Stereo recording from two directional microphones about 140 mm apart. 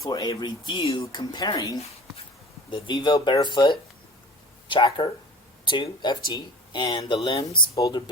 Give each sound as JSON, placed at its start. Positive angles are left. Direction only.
{"t": 0.0, "sound": "speech", "side_deg": 25}
{"t": 2.6, "sound": "speech", "side_deg": 35}
{"t": 7.8, "sound": "speech", "side_deg": 30}